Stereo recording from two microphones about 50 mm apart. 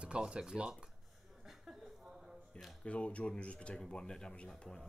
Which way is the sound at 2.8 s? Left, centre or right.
Left.